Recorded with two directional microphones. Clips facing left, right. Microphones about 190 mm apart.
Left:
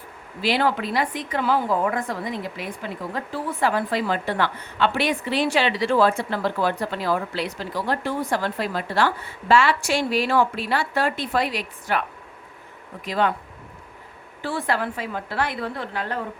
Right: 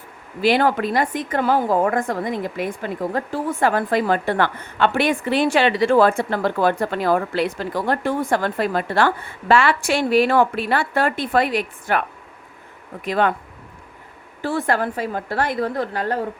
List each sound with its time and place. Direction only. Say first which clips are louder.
0.4 s a woman's voice: right 5 dB; 50° right (ahead or behind)
13.1 s speech: right 3 dB; 55° right (ahead or behind)
14.4 s a woman's voice: right 4 dB; 45° right (ahead or behind)